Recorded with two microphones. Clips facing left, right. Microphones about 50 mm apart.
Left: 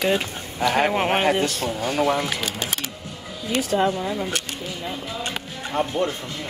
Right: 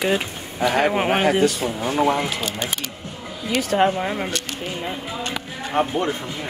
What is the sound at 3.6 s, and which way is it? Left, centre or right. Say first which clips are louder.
Speech: right 3 dB; right.